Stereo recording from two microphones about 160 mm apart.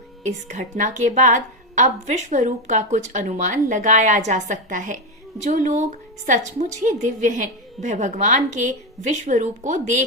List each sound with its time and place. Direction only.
0.2 s a woman's voice: 50° right (ahead or behind)